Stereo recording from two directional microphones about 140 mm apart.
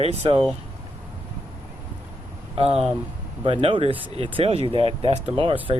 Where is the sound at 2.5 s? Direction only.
45° right (ahead or behind).